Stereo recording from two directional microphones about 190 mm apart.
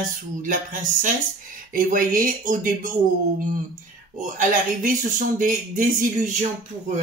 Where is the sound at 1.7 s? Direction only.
45° right (ahead or behind).